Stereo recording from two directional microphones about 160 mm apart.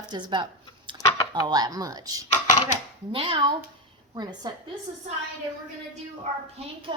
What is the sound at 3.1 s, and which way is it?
A woman's voice, 35° right (ahead or behind).